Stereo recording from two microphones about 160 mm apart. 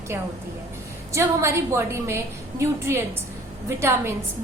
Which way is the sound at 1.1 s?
15° right (ahead or behind).